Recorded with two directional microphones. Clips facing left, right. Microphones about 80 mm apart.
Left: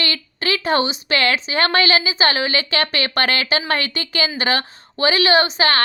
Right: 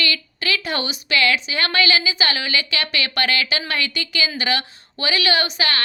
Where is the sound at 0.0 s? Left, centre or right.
Left.